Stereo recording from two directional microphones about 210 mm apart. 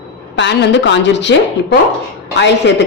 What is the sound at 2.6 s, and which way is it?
Speech, 55° left (ahead or behind).